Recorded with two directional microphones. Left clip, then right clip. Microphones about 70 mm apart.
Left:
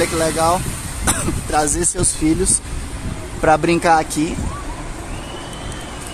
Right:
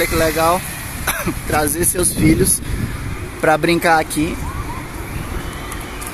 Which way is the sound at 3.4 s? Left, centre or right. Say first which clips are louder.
Even; centre.